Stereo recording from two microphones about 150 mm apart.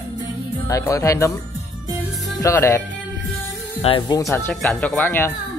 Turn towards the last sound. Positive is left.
turn(degrees=15)  # may be behind; listen again after turning